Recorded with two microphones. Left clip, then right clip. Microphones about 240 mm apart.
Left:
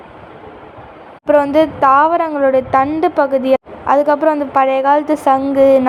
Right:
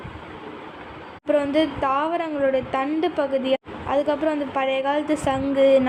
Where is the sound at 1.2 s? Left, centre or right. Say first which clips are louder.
Left 9 dB; left.